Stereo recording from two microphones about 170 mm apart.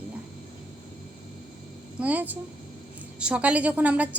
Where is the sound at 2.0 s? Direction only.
10° right (ahead or behind).